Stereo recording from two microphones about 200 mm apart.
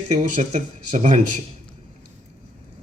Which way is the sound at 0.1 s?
35° right (ahead or behind).